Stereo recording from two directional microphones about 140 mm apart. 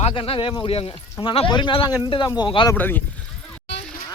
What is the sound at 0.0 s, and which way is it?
Speech, 40° left (ahead or behind).